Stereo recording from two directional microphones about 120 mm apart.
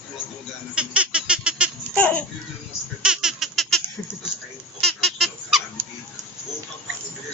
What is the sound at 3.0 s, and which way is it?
Baby laughter, 5° right (ahead or behind).